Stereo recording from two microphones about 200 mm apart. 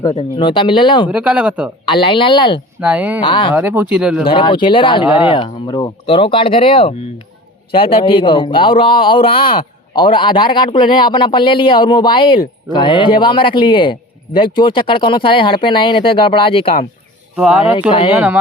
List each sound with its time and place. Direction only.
0.2 s a man's voice: 25° left (ahead or behind)
1.1 s speech: 5° right (ahead or behind)
1.8 s a man's voice: 25° left (ahead or behind)
2.8 s speech: 5° right (ahead or behind)
3.2 s a man's voice: 25° left (ahead or behind)
3.5 s speech: 10° right (ahead or behind)
4.3 s a man's voice: 25° left (ahead or behind)
5.0 s speech: 5° right (ahead or behind)
5.3 s a man's voice: 25° left (ahead or behind)
17.3 s speech: 5° right (ahead or behind)